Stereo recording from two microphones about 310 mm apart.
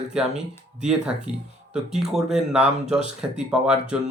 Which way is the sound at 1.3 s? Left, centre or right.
Centre.